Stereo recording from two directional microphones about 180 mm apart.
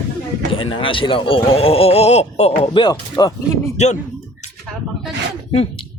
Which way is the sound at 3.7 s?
40° left (ahead or behind).